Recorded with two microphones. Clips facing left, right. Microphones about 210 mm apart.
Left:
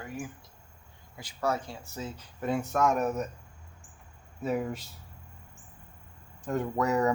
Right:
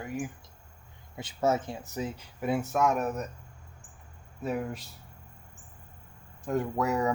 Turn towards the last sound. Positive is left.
turn(degrees=0)  # may be behind; listen again after turning